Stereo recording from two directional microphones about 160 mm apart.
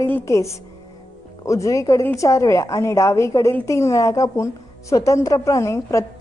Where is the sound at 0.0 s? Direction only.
15° left (ahead or behind).